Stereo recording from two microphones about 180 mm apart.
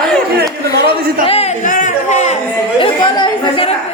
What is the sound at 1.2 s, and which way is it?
Speech, 30° left (ahead or behind).